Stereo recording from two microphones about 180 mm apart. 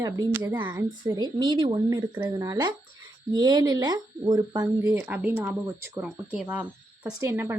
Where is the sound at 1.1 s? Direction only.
25° right (ahead or behind).